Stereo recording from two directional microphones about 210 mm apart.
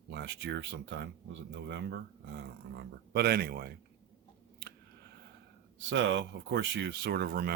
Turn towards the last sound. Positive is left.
turn(degrees=-45)  # may be behind; listen again after turning